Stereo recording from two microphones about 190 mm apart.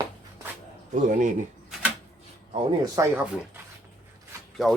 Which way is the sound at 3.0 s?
15° right (ahead or behind).